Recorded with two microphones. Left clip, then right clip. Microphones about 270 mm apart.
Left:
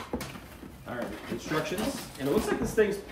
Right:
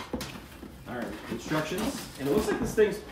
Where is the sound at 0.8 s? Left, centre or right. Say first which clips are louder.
Left 1 dB; centre.